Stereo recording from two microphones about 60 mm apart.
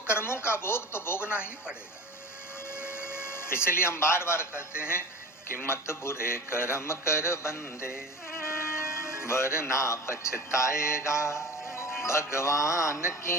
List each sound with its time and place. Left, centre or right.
0.1 s speech: left
1.3 s speech: right
2.7 s a sound: left
5.6 s speech: left